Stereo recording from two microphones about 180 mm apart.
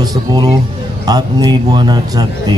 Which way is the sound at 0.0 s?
20° right (ahead or behind).